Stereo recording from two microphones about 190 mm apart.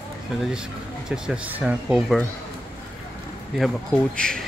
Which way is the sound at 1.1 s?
5° right (ahead or behind).